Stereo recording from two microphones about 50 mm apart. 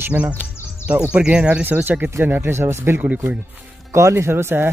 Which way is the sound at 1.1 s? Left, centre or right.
Right.